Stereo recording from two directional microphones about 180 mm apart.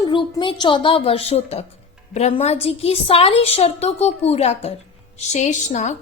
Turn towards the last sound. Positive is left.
turn(degrees=40)  # may be behind; listen again after turning